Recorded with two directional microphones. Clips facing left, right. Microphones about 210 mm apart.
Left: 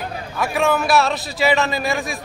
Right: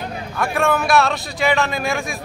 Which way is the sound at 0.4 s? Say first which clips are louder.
Even; centre (ahead or behind).